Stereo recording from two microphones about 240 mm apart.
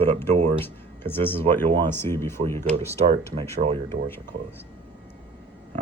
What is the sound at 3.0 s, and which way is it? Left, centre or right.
Speech, right.